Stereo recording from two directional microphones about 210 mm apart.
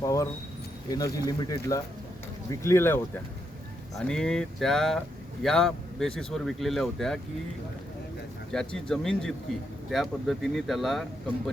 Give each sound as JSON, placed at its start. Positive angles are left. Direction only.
{"t": 0.0, "sound": "speech", "side_deg": 15}
{"t": 8.5, "sound": "speech", "side_deg": 5}